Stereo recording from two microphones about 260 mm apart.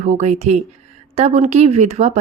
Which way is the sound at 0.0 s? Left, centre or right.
Right.